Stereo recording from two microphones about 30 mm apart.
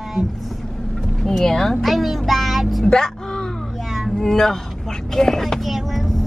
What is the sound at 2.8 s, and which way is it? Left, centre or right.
Speech, left.